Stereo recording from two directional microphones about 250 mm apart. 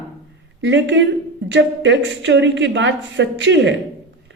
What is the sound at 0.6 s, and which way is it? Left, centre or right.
A woman's voice, right.